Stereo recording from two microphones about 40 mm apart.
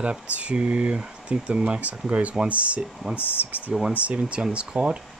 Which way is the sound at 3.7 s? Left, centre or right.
Right.